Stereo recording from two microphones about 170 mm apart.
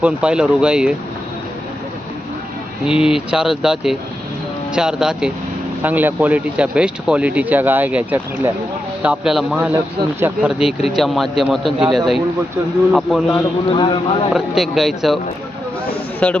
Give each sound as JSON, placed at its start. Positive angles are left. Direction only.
{"t": 0.0, "sound": "a man's voice", "side_deg": -5}
{"t": 2.8, "sound": "a man's voice", "side_deg": -5}
{"t": 13.7, "sound": "speech", "side_deg": 30}
{"t": 14.3, "sound": "a man's voice", "side_deg": 0}
{"t": 16.2, "sound": "a man's voice", "side_deg": 5}